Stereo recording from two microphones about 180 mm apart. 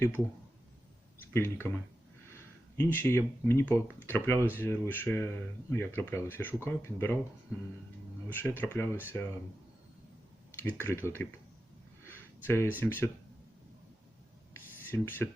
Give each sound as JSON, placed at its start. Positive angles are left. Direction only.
{"t": 1.3, "sound": "speech", "side_deg": 15}
{"t": 2.7, "sound": "speech", "side_deg": 10}
{"t": 8.3, "sound": "speech", "side_deg": 10}
{"t": 10.6, "sound": "speech", "side_deg": 10}
{"t": 12.0, "sound": "a sound", "side_deg": 15}
{"t": 12.8, "sound": "speech", "side_deg": 10}
{"t": 14.5, "sound": "a sound", "side_deg": 10}